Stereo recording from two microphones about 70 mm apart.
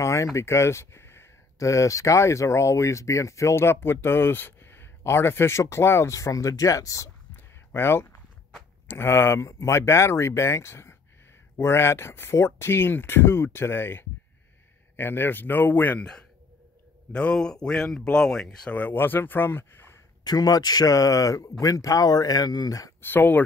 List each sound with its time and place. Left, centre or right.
0.0 s speech: left
7.3 s a sound: left
8.8 s speech: left
17.1 s speech: centre
18.7 s speech: left
20.2 s speech: left
22.9 s speech: left